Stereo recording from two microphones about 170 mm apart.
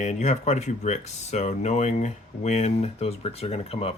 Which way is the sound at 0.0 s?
40° left (ahead or behind).